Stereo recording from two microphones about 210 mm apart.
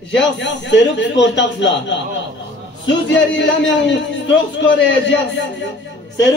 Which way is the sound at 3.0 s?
60° left (ahead or behind).